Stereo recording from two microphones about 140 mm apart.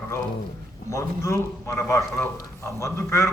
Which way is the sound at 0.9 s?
20° left (ahead or behind).